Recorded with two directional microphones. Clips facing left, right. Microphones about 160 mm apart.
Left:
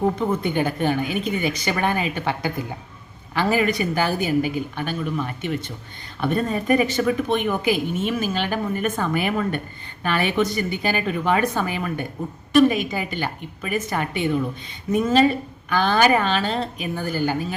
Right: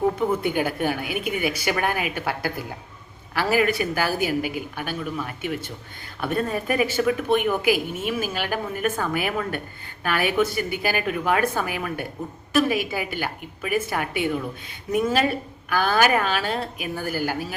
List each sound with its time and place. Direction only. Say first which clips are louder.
0.0 s speech: even; 5° right (ahead or behind)